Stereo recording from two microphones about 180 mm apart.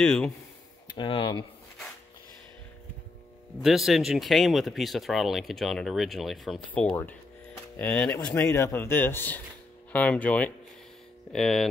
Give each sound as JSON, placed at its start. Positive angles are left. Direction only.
{"t": 0.0, "sound": "speech", "side_deg": 5}
{"t": 0.8, "sound": "speech", "side_deg": 25}
{"t": 3.6, "sound": "speech", "side_deg": 0}